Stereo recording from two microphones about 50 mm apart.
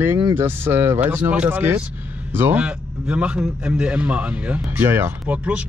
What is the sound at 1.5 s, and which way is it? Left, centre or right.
Speech, right.